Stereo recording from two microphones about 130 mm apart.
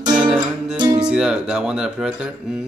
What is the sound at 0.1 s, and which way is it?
Music, 5° right (ahead or behind).